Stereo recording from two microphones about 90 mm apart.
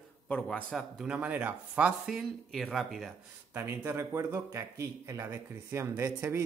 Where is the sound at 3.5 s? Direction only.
25° right (ahead or behind).